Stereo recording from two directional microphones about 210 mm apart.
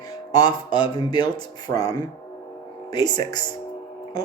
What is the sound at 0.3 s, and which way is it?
Speech, 20° left (ahead or behind).